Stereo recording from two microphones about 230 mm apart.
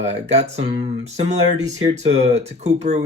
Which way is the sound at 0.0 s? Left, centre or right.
Right.